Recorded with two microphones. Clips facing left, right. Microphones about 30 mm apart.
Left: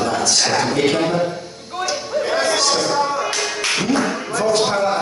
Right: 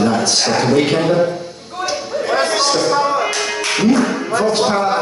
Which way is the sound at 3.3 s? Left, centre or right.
Centre.